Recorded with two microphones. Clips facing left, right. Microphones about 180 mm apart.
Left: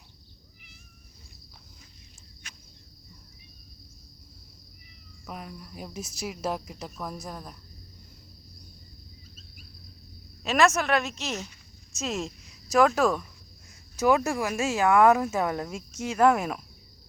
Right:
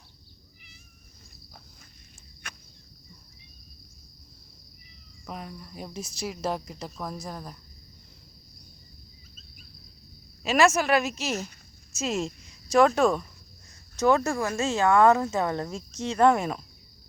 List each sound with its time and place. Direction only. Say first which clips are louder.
2.4 s cricket: right 7 dB; 60° right (ahead or behind)
5.3 s speech: right 1 dB; centre (ahead or behind)
10.4 s speech: right 1 dB; centre (ahead or behind)